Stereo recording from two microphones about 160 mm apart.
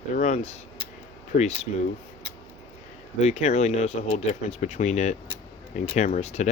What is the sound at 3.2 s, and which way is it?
Speech, 45° left (ahead or behind).